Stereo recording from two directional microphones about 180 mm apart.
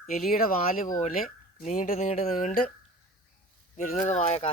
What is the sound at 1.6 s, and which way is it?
Speech, 40° left (ahead or behind).